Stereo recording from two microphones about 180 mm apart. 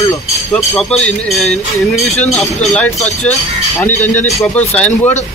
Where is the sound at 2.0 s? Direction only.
35° left (ahead or behind).